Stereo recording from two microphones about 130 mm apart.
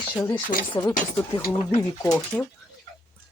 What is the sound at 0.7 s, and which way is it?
Speech, 35° left (ahead or behind).